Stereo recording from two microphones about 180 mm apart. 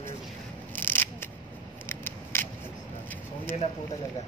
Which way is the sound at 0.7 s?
10° left (ahead or behind).